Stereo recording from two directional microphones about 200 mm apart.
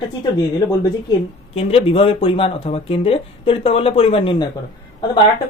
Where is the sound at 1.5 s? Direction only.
30° left (ahead or behind).